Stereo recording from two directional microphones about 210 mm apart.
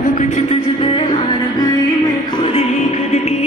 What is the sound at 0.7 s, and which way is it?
Music, 25° left (ahead or behind).